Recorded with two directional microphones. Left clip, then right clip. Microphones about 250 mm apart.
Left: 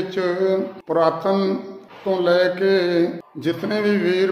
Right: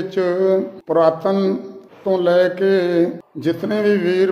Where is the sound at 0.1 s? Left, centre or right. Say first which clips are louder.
Right 4 dB; centre.